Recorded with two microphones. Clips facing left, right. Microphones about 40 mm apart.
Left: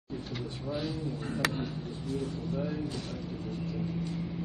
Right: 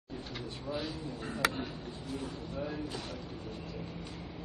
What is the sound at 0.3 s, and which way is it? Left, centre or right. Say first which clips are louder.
Speech: left 2 dB; centre.